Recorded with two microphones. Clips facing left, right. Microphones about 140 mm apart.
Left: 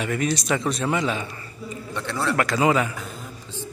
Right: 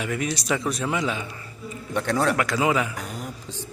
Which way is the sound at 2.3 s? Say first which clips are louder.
Left 2 dB; 5° right (ahead or behind).